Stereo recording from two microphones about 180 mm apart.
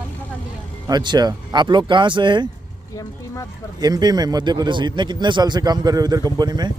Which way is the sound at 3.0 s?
15° left (ahead or behind).